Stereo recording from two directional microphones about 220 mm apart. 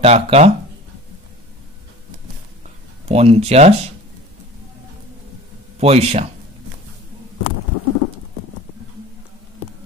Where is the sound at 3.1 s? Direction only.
25° right (ahead or behind).